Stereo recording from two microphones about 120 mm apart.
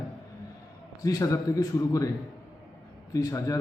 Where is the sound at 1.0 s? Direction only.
30° left (ahead or behind).